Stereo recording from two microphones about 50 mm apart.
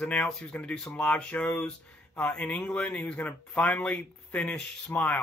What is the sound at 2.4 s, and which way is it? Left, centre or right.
Speech, left.